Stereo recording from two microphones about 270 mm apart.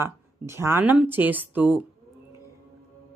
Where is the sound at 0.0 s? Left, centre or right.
Centre.